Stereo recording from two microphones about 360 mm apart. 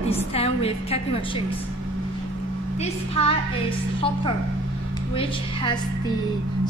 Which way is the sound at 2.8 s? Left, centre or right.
Centre.